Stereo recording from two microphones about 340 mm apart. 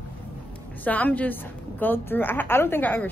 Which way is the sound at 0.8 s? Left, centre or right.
Centre.